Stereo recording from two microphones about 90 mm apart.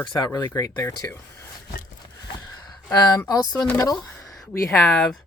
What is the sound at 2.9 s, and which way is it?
Speech, 50° left (ahead or behind).